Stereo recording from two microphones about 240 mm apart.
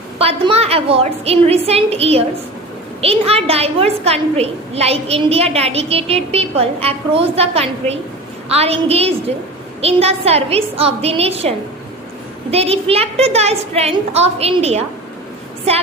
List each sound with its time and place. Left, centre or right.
0.2 s a woman's voice: right